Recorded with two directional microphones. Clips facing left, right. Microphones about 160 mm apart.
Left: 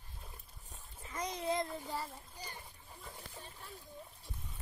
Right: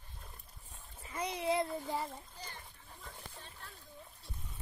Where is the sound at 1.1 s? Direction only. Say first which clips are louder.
Right 2 dB; 10° right (ahead or behind).